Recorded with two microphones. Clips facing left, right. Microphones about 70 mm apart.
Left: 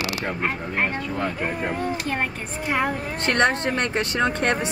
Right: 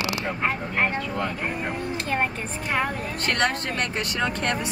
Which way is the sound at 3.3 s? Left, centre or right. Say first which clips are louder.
Left 4 dB; left.